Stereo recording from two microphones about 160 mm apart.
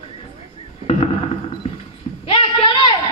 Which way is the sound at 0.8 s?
35° left (ahead or behind).